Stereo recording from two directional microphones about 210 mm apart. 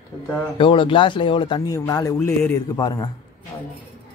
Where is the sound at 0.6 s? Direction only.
25° left (ahead or behind).